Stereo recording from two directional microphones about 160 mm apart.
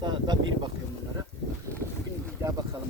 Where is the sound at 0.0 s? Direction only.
25° right (ahead or behind).